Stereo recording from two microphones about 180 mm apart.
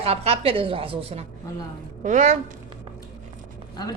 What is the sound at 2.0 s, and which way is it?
Speech, 45° right (ahead or behind).